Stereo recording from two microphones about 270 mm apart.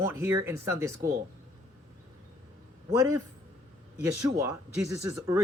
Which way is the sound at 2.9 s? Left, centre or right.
Centre.